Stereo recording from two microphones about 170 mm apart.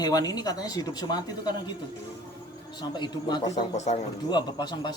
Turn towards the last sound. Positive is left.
turn(degrees=25)  # may be behind; listen again after turning